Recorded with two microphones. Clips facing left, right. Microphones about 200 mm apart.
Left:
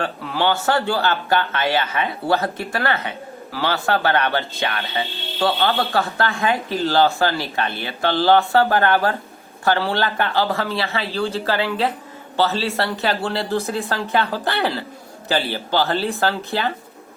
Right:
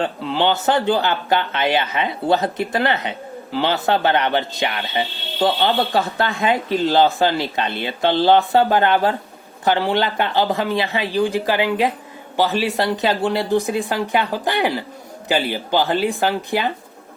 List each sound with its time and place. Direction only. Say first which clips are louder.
0.0 s speech: right 2 dB; 20° right (ahead or behind)